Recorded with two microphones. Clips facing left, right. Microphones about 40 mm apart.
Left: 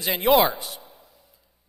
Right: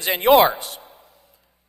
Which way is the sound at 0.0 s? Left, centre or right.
Right.